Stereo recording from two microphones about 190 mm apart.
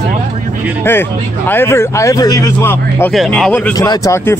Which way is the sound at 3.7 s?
20° left (ahead or behind).